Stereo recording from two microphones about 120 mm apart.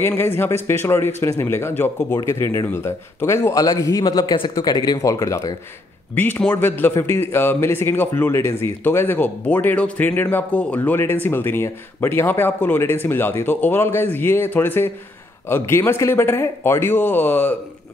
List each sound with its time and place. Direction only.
0.0 s a man's voice: 20° left (ahead or behind)
4.2 s a man's voice: 45° left (ahead or behind)
4.6 s speech: 35° left (ahead or behind)
6.1 s a man's voice: 15° left (ahead or behind)